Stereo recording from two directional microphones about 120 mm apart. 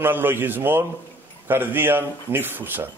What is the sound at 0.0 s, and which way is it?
A man's voice, 15° right (ahead or behind).